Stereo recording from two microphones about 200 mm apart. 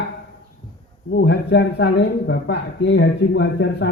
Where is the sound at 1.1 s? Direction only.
60° left (ahead or behind).